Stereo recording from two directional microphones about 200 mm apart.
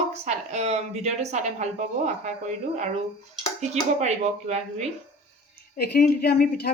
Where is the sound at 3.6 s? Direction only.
35° right (ahead or behind).